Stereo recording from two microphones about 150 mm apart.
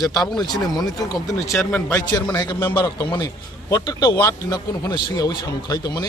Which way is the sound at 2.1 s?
30° left (ahead or behind).